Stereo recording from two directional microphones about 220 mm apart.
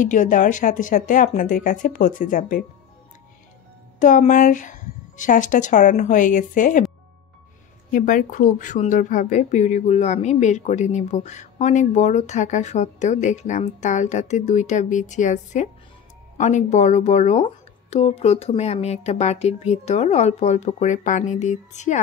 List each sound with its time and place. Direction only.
0.0 s a woman's voice: 35° left (ahead or behind)
4.0 s a woman's voice: 35° left (ahead or behind)
7.9 s a woman's voice: 40° left (ahead or behind)